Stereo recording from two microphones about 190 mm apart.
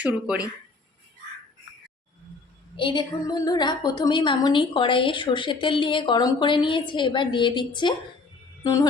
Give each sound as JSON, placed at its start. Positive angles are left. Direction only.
{"t": 0.0, "sound": "speech", "side_deg": -5}
{"t": 2.7, "sound": "a woman's voice", "side_deg": 25}